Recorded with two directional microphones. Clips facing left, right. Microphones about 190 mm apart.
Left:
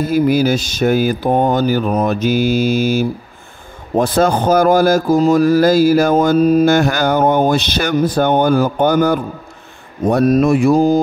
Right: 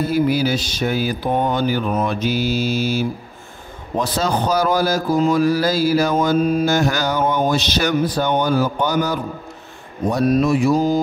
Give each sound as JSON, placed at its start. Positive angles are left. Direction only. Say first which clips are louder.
{"t": 0.1, "sound": "speech", "louder": "left 6 dB", "side_deg": 45}
{"t": 6.6, "sound": "speech", "louder": "left 5 dB", "side_deg": 60}